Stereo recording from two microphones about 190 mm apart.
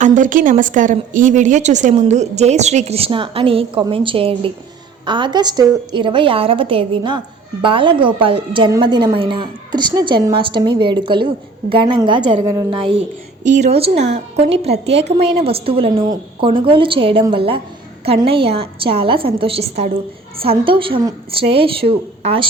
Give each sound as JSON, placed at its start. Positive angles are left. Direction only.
{"t": 0.0, "sound": "a woman's voice", "side_deg": -40}
{"t": 13.4, "sound": "a woman's voice", "side_deg": -40}